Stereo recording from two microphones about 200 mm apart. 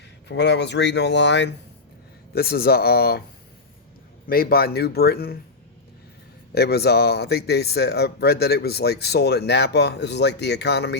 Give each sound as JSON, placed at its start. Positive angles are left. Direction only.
{"t": 0.3, "sound": "speech", "side_deg": 60}
{"t": 2.3, "sound": "speech", "side_deg": 50}
{"t": 4.3, "sound": "speech", "side_deg": 50}
{"t": 6.5, "sound": "speech", "side_deg": 55}